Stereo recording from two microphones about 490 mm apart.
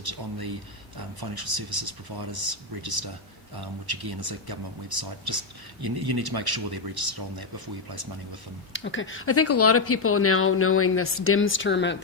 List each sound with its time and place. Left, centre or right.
0.0 s speech: right
8.7 s speech: left